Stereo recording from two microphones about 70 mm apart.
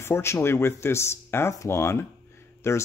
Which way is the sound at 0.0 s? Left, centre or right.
Left.